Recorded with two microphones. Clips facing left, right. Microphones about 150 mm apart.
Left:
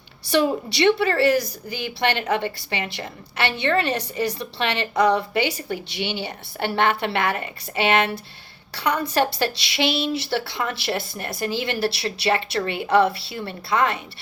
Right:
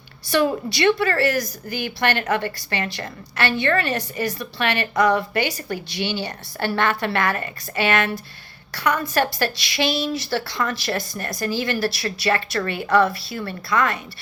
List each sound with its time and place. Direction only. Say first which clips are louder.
0.3 s speech: even; 20° left (ahead or behind)